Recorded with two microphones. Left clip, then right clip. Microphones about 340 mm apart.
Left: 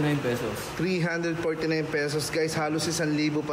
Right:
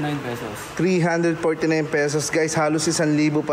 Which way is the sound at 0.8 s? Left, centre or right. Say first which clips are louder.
Right 9 dB; right.